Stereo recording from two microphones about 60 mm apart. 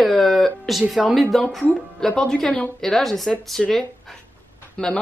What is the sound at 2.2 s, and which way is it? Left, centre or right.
A woman's voice, centre.